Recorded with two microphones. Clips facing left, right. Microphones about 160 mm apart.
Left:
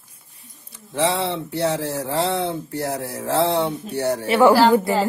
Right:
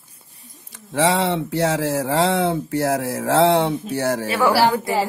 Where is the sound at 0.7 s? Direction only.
90° right.